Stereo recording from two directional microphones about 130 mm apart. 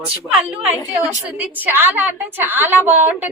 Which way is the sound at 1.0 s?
15° right (ahead or behind).